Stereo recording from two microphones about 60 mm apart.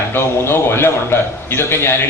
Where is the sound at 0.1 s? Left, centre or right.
Left.